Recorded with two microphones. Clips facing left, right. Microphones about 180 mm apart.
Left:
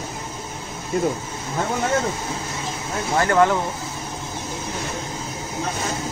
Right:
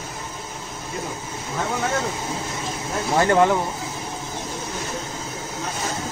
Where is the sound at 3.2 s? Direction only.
20° right (ahead or behind).